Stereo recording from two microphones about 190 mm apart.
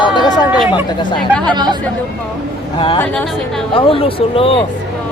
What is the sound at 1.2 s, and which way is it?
Speech, 5° left (ahead or behind).